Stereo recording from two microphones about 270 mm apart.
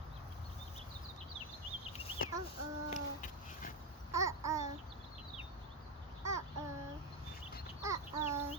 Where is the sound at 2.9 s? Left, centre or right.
Left.